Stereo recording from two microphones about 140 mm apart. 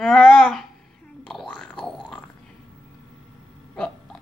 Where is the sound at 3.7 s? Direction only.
5° left (ahead or behind).